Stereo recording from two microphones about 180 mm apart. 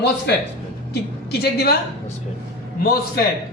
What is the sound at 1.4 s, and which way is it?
Speech, 60° left (ahead or behind).